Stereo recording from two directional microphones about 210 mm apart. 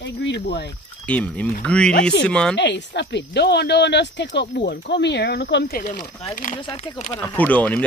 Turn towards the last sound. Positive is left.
turn(degrees=5)  # may be behind; listen again after turning